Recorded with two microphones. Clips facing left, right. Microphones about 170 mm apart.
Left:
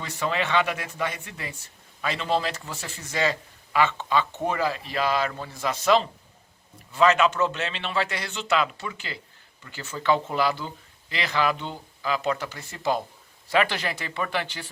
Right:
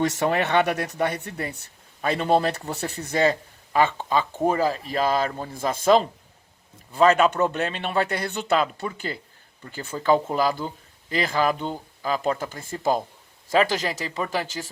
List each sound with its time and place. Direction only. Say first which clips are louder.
0.2 s speech: left 2 dB; 50° right (ahead or behind)
2.0 s a man's voice: right 5 dB; 50° right (ahead or behind)
2.6 s speech: right 7 dB; 35° right (ahead or behind)
3.2 s a man's voice: right 5 dB; 50° right (ahead or behind)
8.4 s a man's voice: right 1 dB; 35° right (ahead or behind)
12.4 s a man's voice: right 4 dB; 50° right (ahead or behind)